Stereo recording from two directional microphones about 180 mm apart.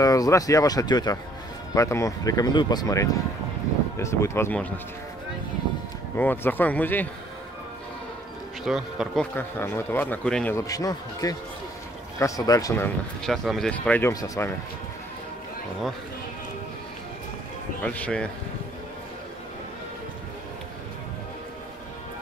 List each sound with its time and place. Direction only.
0.0 s speech: 20° left (ahead or behind)
6.1 s speech: 10° left (ahead or behind)
8.6 s speech: 5° right (ahead or behind)
10.7 s speech: 20° left (ahead or behind)
17.8 s speech: 5° left (ahead or behind)